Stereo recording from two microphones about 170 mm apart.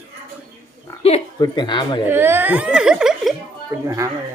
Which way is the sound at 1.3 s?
25° left (ahead or behind).